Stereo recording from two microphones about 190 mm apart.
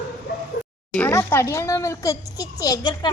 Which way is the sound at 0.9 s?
10° left (ahead or behind).